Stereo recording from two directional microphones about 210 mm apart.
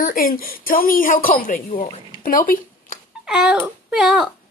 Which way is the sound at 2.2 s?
40° left (ahead or behind).